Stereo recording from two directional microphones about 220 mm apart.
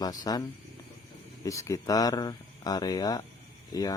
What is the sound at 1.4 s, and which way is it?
Speech, 15° left (ahead or behind).